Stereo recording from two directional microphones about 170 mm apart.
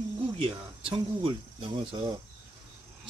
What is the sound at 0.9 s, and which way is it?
Speech, 30° right (ahead or behind).